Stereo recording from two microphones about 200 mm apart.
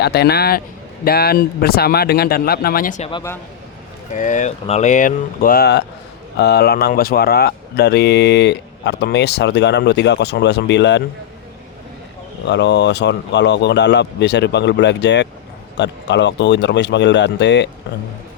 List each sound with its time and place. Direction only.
0.0 s speech: 55° left (ahead or behind)
4.1 s speech: 40° left (ahead or behind); by 11.0 s 60° left (ahead or behind)
12.5 s speech: 60° left (ahead or behind)